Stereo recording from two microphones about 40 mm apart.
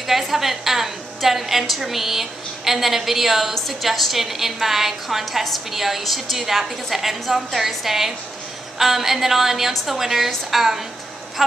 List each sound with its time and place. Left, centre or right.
0.0 s a woman's voice: centre